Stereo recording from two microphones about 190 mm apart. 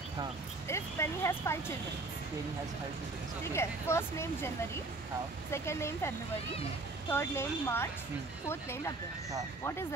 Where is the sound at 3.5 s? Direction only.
15° left (ahead or behind).